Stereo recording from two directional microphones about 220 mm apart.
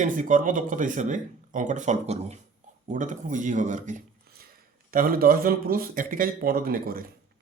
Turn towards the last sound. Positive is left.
turn(degrees=-40)  # may be behind; listen again after turning